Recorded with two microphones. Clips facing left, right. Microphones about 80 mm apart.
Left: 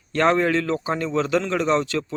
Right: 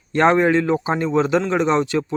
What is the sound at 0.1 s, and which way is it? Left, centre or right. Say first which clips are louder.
A man's voice: right 4 dB; right.